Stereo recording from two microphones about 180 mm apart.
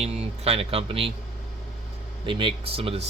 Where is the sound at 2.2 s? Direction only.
25° right (ahead or behind).